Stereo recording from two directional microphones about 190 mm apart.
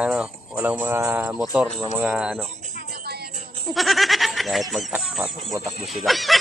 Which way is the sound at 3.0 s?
55° right (ahead or behind).